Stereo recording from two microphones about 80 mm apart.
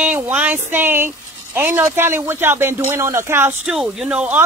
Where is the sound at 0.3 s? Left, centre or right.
Centre.